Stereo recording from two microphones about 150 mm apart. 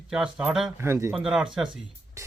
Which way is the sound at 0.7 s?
20° right (ahead or behind).